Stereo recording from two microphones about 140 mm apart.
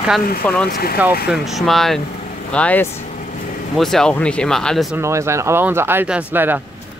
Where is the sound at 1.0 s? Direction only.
10° right (ahead or behind).